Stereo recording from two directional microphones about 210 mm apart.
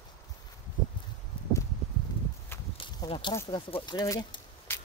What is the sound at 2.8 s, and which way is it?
Walk, 25° left (ahead or behind).